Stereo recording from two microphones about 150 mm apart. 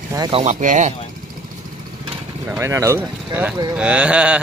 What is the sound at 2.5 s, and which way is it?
Speech, 20° right (ahead or behind).